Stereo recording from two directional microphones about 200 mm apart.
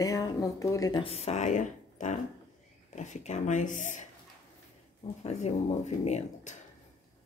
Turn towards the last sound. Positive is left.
turn(degrees=35)  # may be behind; listen again after turning